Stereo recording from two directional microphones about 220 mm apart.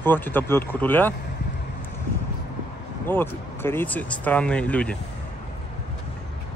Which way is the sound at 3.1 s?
10° left (ahead or behind).